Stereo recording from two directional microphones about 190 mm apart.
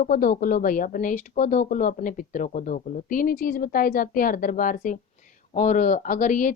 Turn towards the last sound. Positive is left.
turn(degrees=45)  # may be behind; listen again after turning